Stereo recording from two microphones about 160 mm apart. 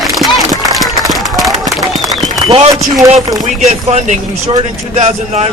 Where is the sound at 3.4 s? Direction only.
45° right (ahead or behind).